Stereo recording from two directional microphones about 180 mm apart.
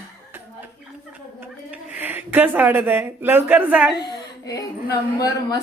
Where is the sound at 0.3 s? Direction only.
10° right (ahead or behind).